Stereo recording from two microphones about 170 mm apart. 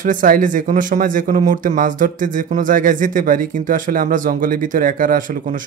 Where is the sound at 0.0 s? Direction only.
50° right (ahead or behind).